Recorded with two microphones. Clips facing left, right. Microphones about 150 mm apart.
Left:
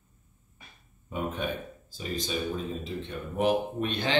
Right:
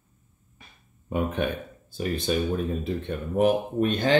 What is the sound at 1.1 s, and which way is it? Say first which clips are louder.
Speech: right 5 dB; 75° right (ahead or behind).